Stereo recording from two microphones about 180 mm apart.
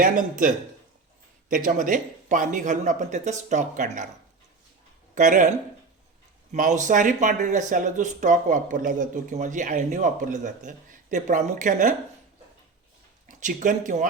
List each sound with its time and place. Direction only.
0.0 s speech: 50° right (ahead or behind)
5.1 s speech: 45° right (ahead or behind)
6.5 s speech: 40° right (ahead or behind)
13.2 s speech: 45° right (ahead or behind)